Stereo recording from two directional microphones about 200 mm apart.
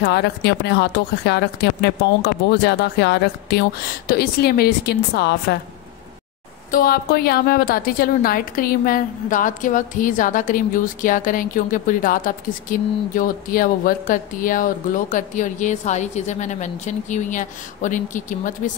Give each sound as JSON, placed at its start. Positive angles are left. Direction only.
{"t": 0.0, "sound": "a woman's voice", "side_deg": 55}
{"t": 6.7, "sound": "a woman's voice", "side_deg": 45}